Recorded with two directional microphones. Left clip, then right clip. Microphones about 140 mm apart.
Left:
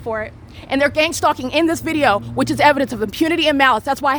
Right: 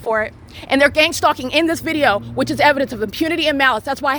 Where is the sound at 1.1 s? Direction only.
10° left (ahead or behind).